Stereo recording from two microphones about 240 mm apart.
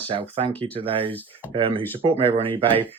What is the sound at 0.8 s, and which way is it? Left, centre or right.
Speech, right.